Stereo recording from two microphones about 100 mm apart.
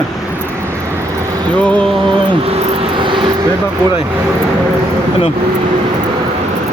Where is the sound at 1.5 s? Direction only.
15° left (ahead or behind).